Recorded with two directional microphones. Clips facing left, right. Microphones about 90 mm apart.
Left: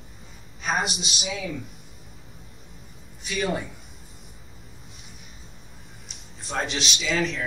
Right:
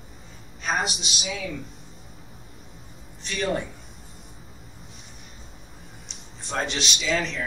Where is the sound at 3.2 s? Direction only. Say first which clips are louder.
Even; 5° left (ahead or behind).